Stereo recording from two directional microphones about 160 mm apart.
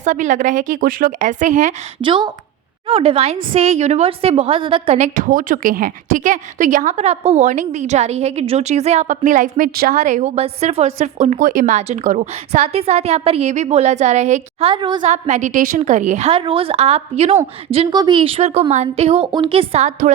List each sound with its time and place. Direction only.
0.0 s a woman's voice: 50° right (ahead or behind)
2.0 s speech: 30° right (ahead or behind)
4.9 s a woman's voice: 50° right (ahead or behind)
14.7 s a woman's voice: 30° right (ahead or behind)
15.0 s a woman's voice: 45° right (ahead or behind)
17.9 s speech: 30° right (ahead or behind); by 20.1 s 45° right (ahead or behind)